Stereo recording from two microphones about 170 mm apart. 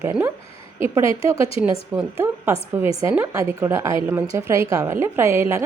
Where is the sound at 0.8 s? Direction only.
15° right (ahead or behind).